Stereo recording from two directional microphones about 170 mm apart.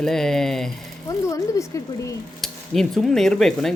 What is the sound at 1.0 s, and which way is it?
Speech, 20° left (ahead or behind).